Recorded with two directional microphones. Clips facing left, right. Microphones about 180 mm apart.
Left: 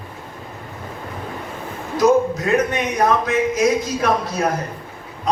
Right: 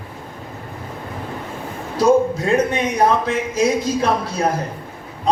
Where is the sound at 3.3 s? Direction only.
30° right (ahead or behind).